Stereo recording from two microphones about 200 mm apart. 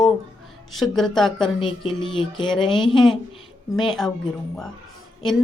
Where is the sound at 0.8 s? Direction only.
Centre (ahead or behind).